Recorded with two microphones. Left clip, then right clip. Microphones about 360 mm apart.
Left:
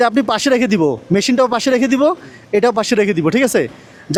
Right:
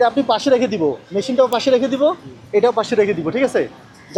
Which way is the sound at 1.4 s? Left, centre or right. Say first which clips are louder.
Right 2 dB; left.